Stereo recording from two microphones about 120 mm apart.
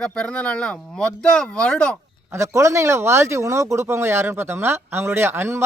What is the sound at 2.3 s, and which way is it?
Speech, 25° right (ahead or behind).